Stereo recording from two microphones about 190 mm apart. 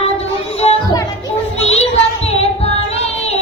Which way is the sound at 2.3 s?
35° left (ahead or behind).